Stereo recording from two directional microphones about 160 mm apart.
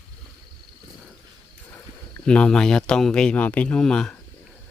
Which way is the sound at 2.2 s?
5° left (ahead or behind).